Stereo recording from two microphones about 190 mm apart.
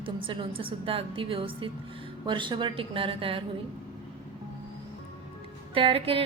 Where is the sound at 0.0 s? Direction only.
25° right (ahead or behind).